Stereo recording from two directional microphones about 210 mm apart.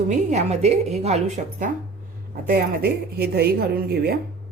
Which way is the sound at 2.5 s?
45° right (ahead or behind).